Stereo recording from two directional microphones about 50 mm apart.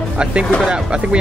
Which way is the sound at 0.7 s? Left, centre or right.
Centre.